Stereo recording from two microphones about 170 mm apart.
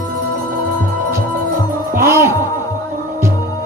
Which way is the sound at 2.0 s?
15° right (ahead or behind).